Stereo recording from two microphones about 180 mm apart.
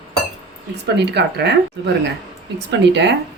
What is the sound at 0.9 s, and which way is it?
Speech, 70° right (ahead or behind).